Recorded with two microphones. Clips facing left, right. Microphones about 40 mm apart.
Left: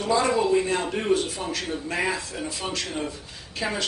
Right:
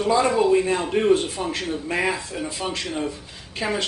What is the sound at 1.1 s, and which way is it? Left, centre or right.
Speech, right.